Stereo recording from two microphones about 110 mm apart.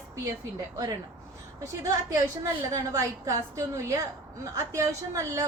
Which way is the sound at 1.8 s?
30° right (ahead or behind).